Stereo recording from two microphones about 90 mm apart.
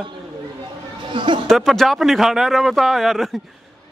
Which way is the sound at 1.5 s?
5° left (ahead or behind).